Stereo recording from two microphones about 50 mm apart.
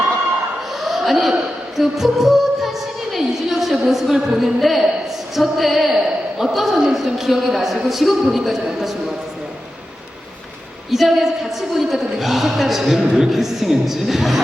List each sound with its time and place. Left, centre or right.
0.7 s laughter: centre
1.3 s singing: centre
5.3 s a man's voice: centre
10.9 s a man's voice: centre